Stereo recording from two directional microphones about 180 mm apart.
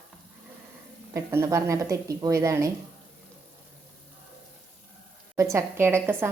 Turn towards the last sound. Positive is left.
turn(degrees=-15)  # may be behind; listen again after turning